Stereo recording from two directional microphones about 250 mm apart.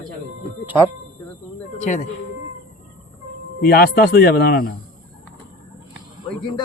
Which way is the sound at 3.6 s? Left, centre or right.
Left.